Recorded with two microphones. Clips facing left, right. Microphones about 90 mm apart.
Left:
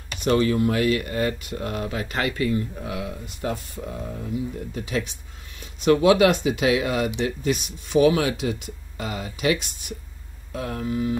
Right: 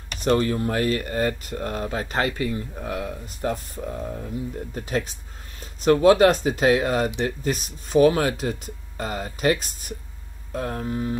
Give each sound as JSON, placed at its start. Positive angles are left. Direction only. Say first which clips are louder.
{"t": 0.3, "sound": "speech", "louder": "left 1 dB", "side_deg": -40}
{"t": 2.7, "sound": "speech", "louder": "right 1 dB", "side_deg": -40}
{"t": 4.2, "sound": "speech", "louder": "left 2 dB", "side_deg": -40}